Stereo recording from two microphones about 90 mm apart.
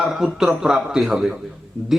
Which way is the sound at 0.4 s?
5° right (ahead or behind).